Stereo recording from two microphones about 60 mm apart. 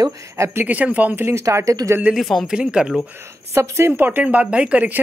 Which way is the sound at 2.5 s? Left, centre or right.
Centre.